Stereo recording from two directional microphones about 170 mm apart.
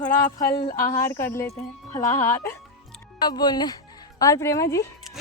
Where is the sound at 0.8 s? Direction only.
15° left (ahead or behind).